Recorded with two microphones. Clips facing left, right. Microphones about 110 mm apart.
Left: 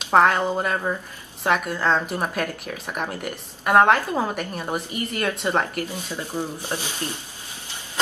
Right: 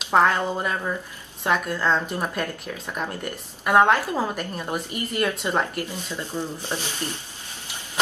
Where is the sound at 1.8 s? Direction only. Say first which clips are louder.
Left 1 dB; 20° left (ahead or behind); by 5.9 s centre (ahead or behind).